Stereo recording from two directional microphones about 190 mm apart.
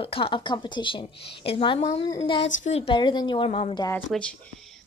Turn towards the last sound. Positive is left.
turn(degrees=5)  # may be behind; listen again after turning